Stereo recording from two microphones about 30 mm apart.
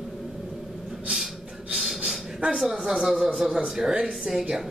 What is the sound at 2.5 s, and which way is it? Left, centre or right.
Speech, centre.